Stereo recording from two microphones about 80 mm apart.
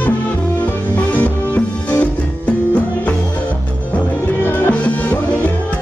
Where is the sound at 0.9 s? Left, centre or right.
Centre.